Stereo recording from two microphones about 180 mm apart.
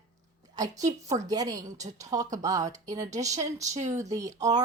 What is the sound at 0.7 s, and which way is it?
Speech, 40° right (ahead or behind).